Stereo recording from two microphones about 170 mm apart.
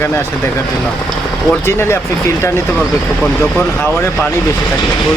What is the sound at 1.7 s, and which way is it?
Speech, 15° left (ahead or behind).